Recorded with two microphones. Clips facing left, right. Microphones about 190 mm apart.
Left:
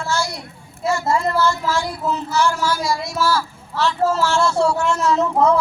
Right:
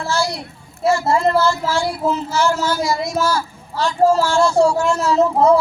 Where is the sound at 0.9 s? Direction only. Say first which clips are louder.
Right 4 dB; 35° right (ahead or behind).